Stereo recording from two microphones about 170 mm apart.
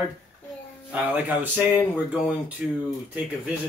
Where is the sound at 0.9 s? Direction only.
10° right (ahead or behind).